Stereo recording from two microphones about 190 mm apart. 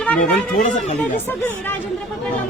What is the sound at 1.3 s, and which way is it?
Speech, 10° left (ahead or behind).